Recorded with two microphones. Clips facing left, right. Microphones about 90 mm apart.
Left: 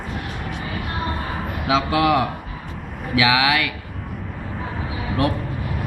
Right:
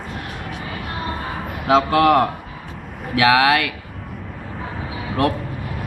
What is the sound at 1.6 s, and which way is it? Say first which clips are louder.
Speech: right 4 dB; 50° right (ahead or behind).